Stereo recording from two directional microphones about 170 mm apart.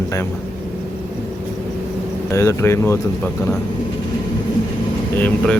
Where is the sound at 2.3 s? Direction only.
15° left (ahead or behind).